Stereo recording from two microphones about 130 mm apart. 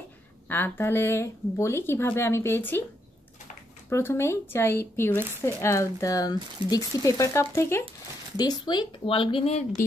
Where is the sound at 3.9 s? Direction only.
20° left (ahead or behind).